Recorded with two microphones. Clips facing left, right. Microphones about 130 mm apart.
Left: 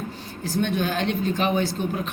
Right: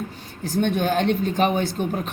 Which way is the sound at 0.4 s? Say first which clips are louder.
Right 3 dB; 55° right (ahead or behind).